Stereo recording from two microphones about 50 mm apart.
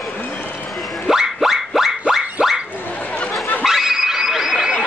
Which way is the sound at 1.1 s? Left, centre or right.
Centre.